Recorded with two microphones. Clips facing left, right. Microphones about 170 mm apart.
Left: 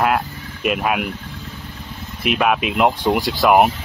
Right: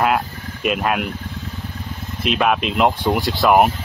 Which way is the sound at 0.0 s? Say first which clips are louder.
Even; centre (ahead or behind).